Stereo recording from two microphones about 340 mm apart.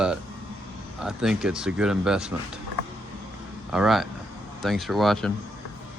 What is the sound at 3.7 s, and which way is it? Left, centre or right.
A man's voice, centre.